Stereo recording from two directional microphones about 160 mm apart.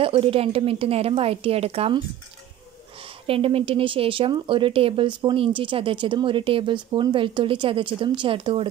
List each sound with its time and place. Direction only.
0.0 s speech: 35° right (ahead or behind)
3.3 s speech: 35° right (ahead or behind)